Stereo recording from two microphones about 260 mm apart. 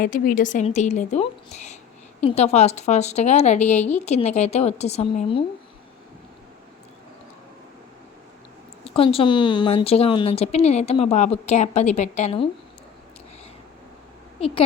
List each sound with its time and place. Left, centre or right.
0.0 s speech: left
9.0 s speech: left
14.3 s speech: left